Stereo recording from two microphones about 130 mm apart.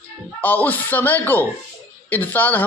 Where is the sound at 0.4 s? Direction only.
15° left (ahead or behind).